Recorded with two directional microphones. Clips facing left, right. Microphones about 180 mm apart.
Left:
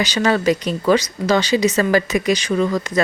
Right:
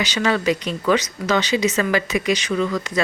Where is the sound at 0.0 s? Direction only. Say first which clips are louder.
Left 3 dB; 40° left (ahead or behind).